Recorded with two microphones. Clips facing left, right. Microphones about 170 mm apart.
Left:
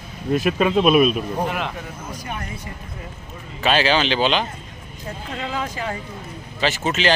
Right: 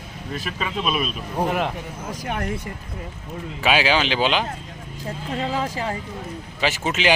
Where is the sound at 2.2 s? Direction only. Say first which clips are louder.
Right 5 dB; 75° right (ahead or behind).